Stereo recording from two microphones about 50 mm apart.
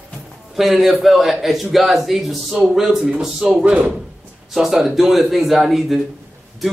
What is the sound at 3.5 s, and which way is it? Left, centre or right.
Speech, right.